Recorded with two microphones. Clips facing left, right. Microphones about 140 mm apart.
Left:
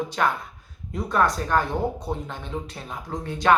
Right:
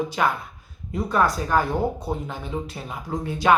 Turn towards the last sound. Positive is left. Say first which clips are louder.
# right 1 dB
turn(degrees=-5)  # may be behind; listen again after turning